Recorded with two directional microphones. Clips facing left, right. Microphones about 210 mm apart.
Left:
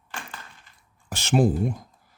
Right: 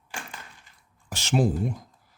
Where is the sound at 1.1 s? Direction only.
55° left (ahead or behind).